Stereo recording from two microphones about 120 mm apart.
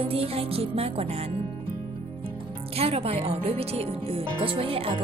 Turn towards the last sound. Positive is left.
turn(degrees=-50)  # may be behind; listen again after turning